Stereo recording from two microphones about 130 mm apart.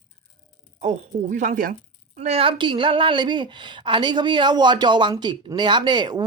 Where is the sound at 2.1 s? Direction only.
55° right (ahead or behind); by 6.2 s 35° right (ahead or behind).